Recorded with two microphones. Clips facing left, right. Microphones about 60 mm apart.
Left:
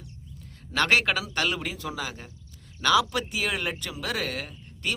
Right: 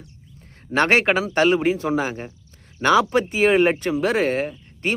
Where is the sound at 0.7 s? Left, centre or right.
Right.